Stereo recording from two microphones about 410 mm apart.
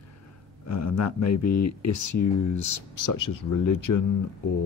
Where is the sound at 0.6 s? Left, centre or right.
Left.